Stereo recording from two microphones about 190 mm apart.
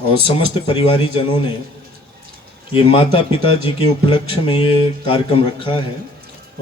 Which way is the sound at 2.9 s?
30° left (ahead or behind).